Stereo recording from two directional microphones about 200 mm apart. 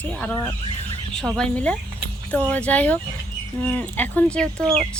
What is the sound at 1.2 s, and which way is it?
Speech, 5° left (ahead or behind).